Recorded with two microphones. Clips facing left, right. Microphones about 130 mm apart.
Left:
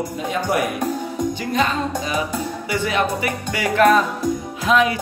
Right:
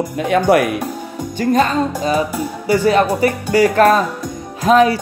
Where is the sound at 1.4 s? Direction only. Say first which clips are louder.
Right 10 dB; 45° right (ahead or behind).